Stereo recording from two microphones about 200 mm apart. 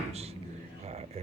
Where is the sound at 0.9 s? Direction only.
30° right (ahead or behind).